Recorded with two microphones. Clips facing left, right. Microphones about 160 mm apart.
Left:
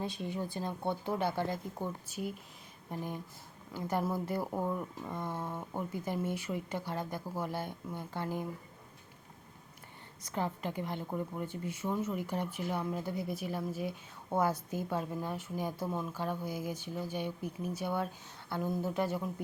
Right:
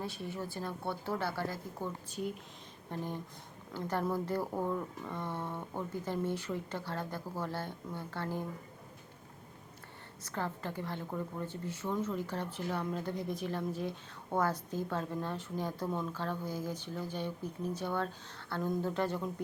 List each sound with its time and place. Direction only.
0.0 s speech: 20° left (ahead or behind)
2.0 s speech: 5° left (ahead or behind)
10.2 s speech: 15° left (ahead or behind)